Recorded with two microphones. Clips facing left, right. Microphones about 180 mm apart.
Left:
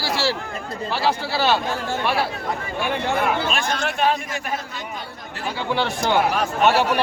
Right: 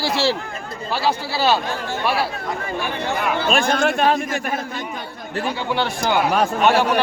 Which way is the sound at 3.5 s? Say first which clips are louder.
Right 6 dB; 50° right (ahead or behind).